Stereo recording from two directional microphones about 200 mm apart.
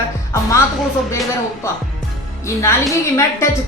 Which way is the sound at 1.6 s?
15° left (ahead or behind).